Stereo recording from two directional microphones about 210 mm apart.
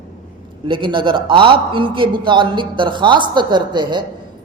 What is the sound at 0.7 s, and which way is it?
A man's voice, 25° right (ahead or behind).